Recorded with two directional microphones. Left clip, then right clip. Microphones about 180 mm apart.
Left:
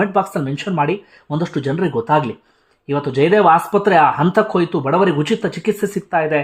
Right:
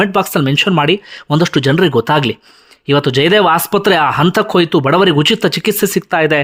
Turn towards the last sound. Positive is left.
turn(degrees=-30)  # may be behind; listen again after turning